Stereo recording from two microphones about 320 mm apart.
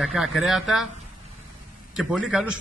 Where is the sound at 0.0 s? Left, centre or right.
Centre.